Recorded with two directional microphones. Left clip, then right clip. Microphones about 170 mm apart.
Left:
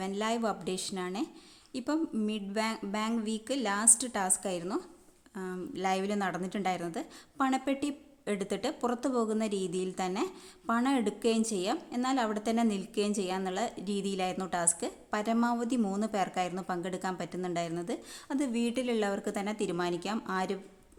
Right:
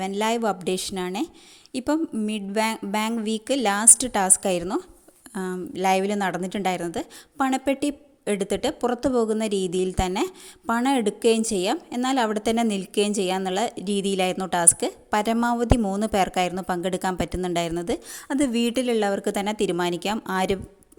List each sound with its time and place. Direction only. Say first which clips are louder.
0.0 s a woman's voice: right 8 dB; 35° right (ahead or behind)
5.7 s a woman's voice: right 10 dB; 35° right (ahead or behind)